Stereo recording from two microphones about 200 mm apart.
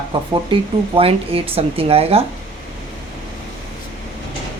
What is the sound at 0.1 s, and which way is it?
Speech, 25° right (ahead or behind).